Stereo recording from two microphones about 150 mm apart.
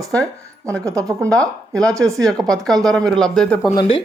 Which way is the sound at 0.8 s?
20° right (ahead or behind).